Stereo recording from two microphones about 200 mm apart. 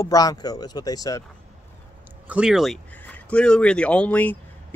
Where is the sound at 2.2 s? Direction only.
5° right (ahead or behind).